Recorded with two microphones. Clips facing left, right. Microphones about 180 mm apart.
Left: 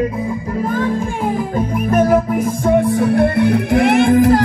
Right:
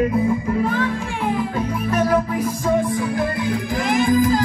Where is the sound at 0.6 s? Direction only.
45° left (ahead or behind).